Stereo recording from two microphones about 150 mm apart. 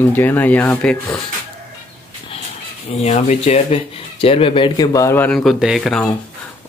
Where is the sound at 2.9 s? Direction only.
50° left (ahead or behind); by 5.3 s 20° left (ahead or behind).